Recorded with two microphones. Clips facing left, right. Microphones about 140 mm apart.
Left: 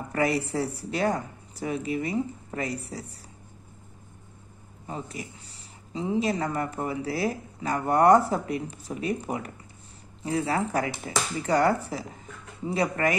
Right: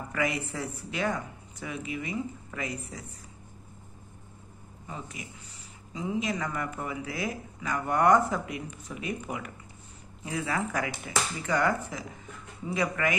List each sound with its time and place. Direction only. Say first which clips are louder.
0.1 s speech: left 6 dB; 35° left (ahead or behind)
4.8 s speech: left 5 dB; 35° left (ahead or behind)